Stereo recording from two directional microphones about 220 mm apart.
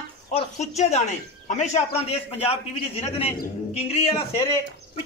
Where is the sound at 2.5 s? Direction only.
25° left (ahead or behind).